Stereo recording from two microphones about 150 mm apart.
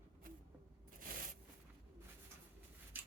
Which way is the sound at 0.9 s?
65° right (ahead or behind).